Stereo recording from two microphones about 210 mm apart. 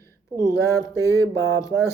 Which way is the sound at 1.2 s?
15° right (ahead or behind).